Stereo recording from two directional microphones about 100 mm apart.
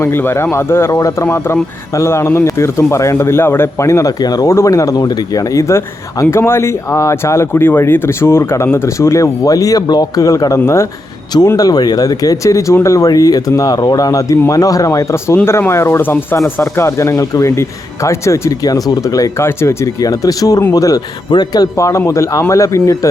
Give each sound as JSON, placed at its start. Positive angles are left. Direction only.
{"t": 0.0, "sound": "speech", "side_deg": 25}